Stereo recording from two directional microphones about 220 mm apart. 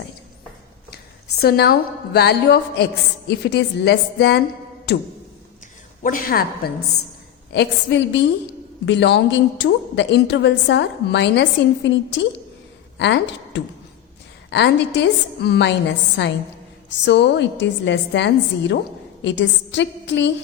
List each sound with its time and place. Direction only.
1.4 s a woman's voice: 45° left (ahead or behind)
6.0 s a woman's voice: 40° left (ahead or behind); by 20.3 s 55° left (ahead or behind)